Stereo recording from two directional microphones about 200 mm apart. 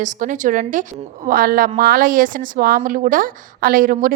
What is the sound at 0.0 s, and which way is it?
A woman's voice, 40° right (ahead or behind).